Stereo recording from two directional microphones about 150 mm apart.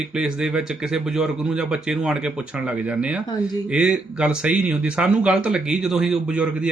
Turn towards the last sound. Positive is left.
turn(degrees=-5)  # may be behind; listen again after turning